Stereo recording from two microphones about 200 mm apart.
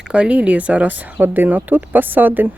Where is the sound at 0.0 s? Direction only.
5° right (ahead or behind).